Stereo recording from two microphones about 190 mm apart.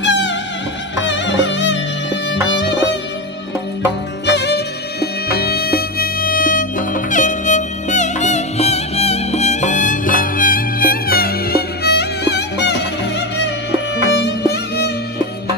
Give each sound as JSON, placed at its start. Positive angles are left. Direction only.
{"t": 0.0, "sound": "music", "side_deg": 70}
{"t": 3.8, "sound": "music", "side_deg": 65}
{"t": 14.0, "sound": "music", "side_deg": 65}